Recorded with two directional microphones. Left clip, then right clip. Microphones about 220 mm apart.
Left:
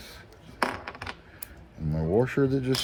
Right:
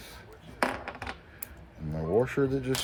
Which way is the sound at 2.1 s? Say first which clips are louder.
Left 2 dB; 35° left (ahead or behind).